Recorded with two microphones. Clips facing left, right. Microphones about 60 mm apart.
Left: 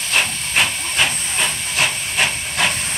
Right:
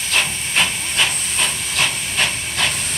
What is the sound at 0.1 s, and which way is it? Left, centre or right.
Hiss, centre.